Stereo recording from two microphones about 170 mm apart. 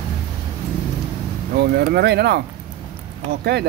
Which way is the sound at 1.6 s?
70° right (ahead or behind).